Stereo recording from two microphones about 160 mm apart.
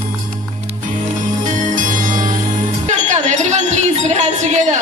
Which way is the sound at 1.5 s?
55° right (ahead or behind).